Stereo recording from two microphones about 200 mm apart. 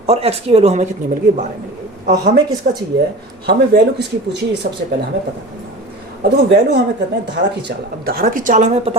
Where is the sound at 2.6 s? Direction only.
35° right (ahead or behind).